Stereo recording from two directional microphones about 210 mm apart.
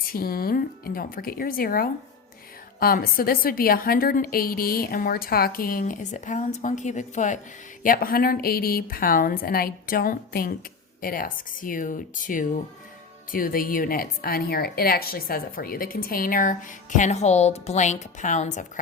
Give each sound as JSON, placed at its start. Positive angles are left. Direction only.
{"t": 0.0, "sound": "a woman's voice", "side_deg": 45}